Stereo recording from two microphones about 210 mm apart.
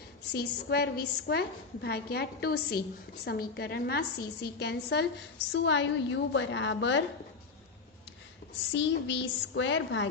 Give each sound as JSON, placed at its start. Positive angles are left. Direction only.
{"t": 0.3, "sound": "a woman's voice", "side_deg": 50}
{"t": 8.7, "sound": "a woman's voice", "side_deg": 60}